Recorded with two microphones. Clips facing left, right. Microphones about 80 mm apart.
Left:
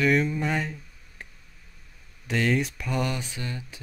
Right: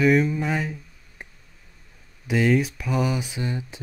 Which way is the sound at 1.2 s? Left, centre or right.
Centre.